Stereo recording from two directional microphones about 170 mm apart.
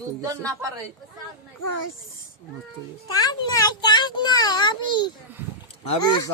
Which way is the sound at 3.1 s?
20° left (ahead or behind).